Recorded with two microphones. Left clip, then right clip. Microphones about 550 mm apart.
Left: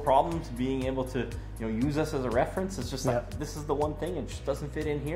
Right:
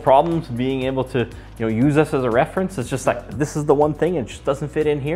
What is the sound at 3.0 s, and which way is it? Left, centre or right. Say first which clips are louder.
Speech: right 9 dB; right.